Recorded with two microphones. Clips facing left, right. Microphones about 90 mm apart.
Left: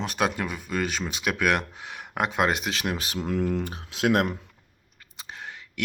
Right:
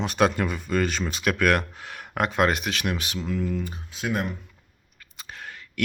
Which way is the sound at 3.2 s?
60° left (ahead or behind).